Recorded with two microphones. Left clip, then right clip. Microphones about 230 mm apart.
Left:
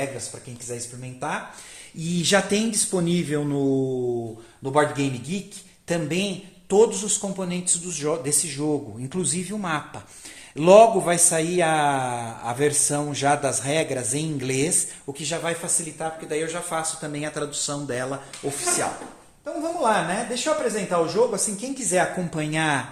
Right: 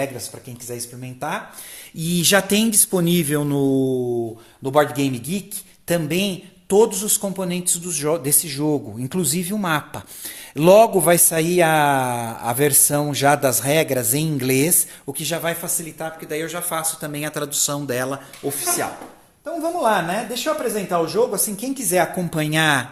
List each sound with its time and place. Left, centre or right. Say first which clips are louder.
0.7 s a man's voice: right 2 dB; right
19.8 s a man's voice: right 2 dB; right